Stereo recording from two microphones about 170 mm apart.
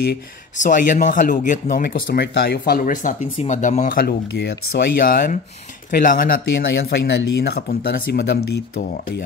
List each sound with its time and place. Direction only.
0.6 s speech: 50° left (ahead or behind)
6.7 s speech: 90° left; by 9.2 s 70° left (ahead or behind)